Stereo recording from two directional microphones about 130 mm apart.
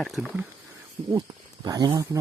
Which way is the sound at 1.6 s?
30° right (ahead or behind).